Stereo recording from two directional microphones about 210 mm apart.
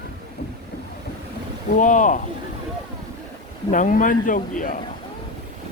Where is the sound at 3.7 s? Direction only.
40° left (ahead or behind).